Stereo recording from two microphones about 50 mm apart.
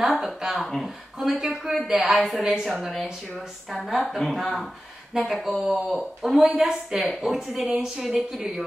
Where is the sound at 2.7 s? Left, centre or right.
Centre.